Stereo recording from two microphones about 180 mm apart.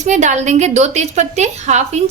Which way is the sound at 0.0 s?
40° right (ahead or behind).